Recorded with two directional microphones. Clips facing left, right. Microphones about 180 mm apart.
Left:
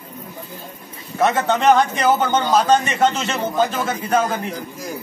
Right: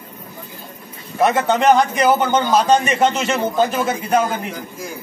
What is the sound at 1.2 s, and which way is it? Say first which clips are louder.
A man's voice: right 1 dB; 15° right (ahead or behind).